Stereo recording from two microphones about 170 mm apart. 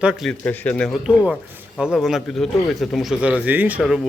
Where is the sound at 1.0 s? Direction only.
5° right (ahead or behind).